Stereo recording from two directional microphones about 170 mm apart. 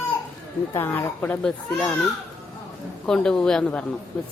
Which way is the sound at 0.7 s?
15° left (ahead or behind).